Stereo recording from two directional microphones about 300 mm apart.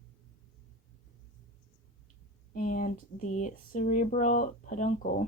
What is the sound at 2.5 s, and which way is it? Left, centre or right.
Speech, left.